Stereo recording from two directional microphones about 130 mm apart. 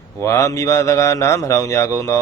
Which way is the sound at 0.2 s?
20° left (ahead or behind).